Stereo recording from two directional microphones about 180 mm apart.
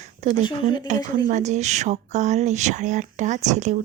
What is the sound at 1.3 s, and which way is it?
Speech, 40° right (ahead or behind).